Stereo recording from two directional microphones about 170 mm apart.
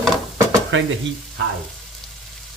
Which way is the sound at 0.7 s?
90° right.